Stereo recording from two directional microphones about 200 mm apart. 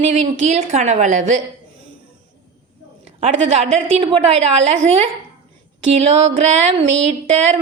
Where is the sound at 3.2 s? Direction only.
30° right (ahead or behind).